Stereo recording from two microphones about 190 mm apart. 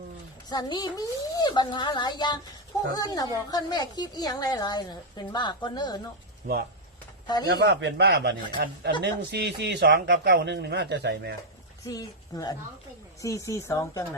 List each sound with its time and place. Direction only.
0.5 s a woman's voice: 20° left (ahead or behind)
6.4 s speech: 45° right (ahead or behind)
7.4 s speech: 60° right (ahead or behind)
9.0 s speech: 65° right (ahead or behind)
11.9 s a woman's voice: 20° left (ahead or behind)